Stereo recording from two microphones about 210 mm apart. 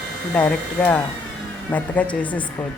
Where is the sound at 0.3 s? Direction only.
5° left (ahead or behind).